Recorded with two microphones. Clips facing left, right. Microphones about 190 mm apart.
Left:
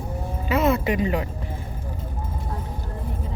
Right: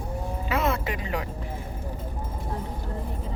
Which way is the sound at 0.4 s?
5° left (ahead or behind).